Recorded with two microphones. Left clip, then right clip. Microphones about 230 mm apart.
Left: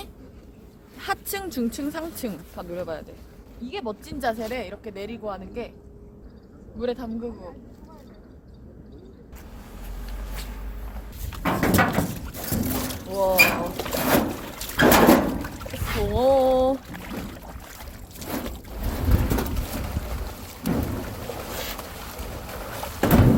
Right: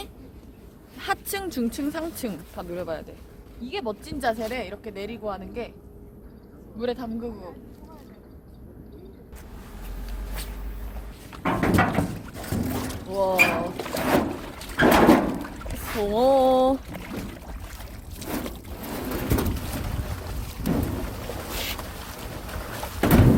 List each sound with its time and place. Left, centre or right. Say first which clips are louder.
0.9 s speech: right 1 dB; centre
6.7 s speech: even; centre
11.3 s a sound: left 1 dB; left
13.3 s pigeon: left 2 dB; left
16.0 s a sound: even; right
17.0 s boat: left 1 dB; centre
18.3 s boat: even; centre
21.5 s boat: right 4 dB; centre
21.8 s boat: left 1 dB; centre
23.0 s a sound: even; centre